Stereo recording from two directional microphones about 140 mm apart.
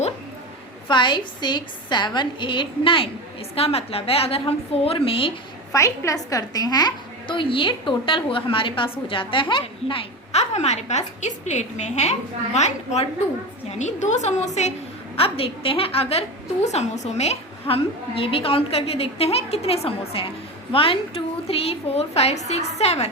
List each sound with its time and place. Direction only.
0.9 s a woman's voice: 35° left (ahead or behind)
5.7 s a woman's voice: 20° left (ahead or behind); by 14.7 s 55° left (ahead or behind)
15.1 s a woman's voice: 40° left (ahead or behind)